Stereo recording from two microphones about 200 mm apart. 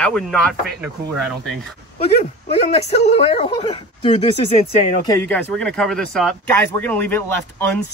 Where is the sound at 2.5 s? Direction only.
30° left (ahead or behind).